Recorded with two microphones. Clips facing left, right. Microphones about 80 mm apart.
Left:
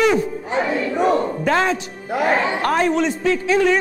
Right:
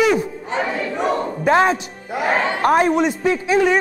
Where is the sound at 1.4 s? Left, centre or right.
Right.